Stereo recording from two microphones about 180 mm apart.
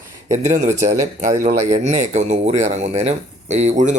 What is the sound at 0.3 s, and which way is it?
Speech, 40° right (ahead or behind).